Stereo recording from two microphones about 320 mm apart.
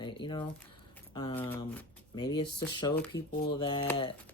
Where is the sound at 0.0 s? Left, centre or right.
Centre.